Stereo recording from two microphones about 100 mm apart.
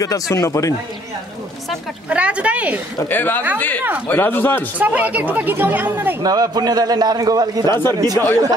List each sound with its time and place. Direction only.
0.0 s speech: 35° left (ahead or behind)
2.0 s speech: 10° right (ahead or behind)
3.1 s speech: 20° left (ahead or behind)
4.7 s speech: 15° right (ahead or behind)
6.2 s a man's voice: 40° right (ahead or behind)